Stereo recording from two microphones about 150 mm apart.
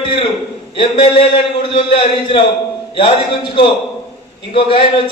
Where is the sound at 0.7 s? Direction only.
35° left (ahead or behind).